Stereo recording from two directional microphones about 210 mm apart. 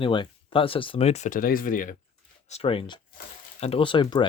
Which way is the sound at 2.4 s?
30° left (ahead or behind).